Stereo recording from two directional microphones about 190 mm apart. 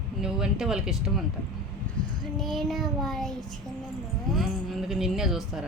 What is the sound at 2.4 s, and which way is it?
Speech, centre (ahead or behind).